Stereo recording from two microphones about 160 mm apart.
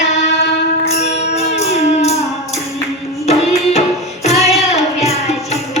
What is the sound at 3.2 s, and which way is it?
Music, 40° left (ahead or behind).